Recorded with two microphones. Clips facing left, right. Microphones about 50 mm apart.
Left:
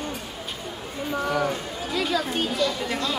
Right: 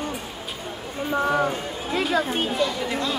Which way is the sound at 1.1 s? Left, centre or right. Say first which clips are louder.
Right 3 dB; right.